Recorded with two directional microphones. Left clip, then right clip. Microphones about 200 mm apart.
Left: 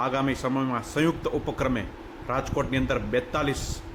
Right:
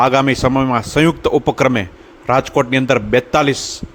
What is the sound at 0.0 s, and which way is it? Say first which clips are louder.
A man's voice: right 14 dB; 50° right (ahead or behind).